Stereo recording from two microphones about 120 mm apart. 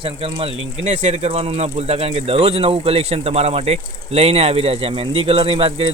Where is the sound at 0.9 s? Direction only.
75° right (ahead or behind).